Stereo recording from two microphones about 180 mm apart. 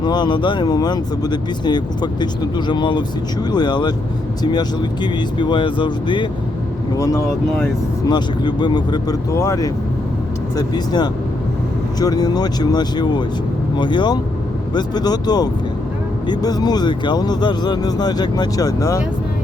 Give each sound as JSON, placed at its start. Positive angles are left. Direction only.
{"t": 0.0, "sound": "speech", "side_deg": 25}